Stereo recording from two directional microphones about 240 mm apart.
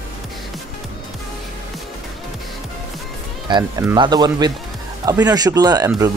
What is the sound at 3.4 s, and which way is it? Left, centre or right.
Speech, centre.